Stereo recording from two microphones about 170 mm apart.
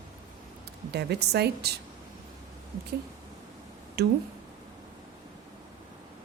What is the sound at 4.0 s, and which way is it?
Speech, 70° right (ahead or behind).